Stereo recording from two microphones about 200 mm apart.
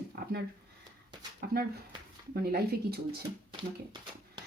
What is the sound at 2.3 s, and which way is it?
Speech, 50° right (ahead or behind).